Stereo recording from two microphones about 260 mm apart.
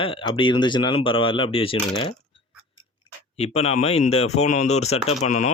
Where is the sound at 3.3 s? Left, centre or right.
Left.